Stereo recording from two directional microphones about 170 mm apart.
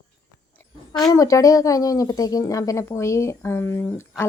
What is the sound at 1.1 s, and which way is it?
A woman's voice, 20° left (ahead or behind).